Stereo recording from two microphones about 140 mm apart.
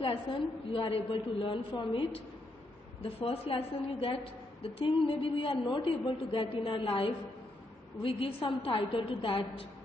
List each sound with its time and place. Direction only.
0.0 s a man's voice: 35° left (ahead or behind)